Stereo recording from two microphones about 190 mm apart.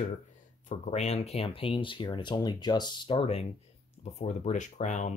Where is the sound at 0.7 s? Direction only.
35° left (ahead or behind).